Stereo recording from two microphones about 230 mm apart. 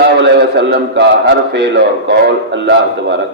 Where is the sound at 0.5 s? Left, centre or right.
Right.